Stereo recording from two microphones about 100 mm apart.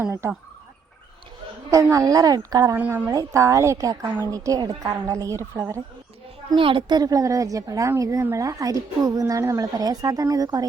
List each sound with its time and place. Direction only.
0.0 s speech: 25° right (ahead or behind)
1.7 s a woman's voice: 35° right (ahead or behind)
2.7 s a woman's voice: 20° right (ahead or behind)
3.1 s a woman's voice: 35° right (ahead or behind)
5.5 s speech: 25° right (ahead or behind)
6.6 s a woman's voice: 60° right (ahead or behind); by 10.7 s 40° right (ahead or behind)